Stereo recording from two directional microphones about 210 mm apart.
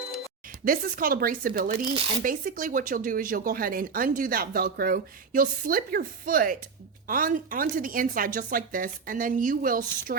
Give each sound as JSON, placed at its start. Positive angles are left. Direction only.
{"t": 0.6, "sound": "speech", "side_deg": -40}